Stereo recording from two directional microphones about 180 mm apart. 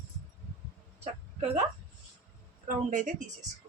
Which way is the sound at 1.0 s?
40° right (ahead or behind).